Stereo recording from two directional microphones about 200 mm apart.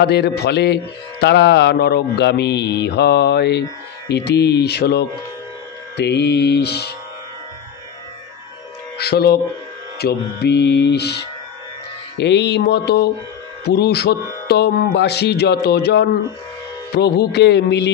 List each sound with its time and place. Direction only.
0.0 s mantra: 55° left (ahead or behind)
8.9 s speech: 55° left (ahead or behind)
9.9 s mantra: 55° left (ahead or behind)